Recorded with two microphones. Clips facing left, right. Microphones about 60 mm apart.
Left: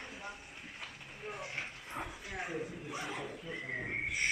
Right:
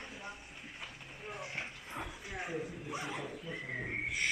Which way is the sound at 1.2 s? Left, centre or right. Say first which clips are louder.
Left 1 dB; centre.